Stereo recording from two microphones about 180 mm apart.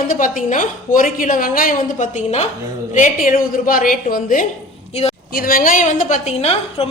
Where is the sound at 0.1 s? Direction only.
45° left (ahead or behind).